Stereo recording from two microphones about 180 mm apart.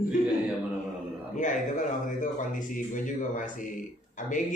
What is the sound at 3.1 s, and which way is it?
Speech, 45° left (ahead or behind).